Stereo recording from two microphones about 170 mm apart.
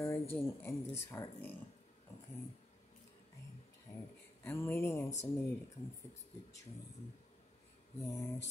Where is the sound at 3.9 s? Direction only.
15° left (ahead or behind).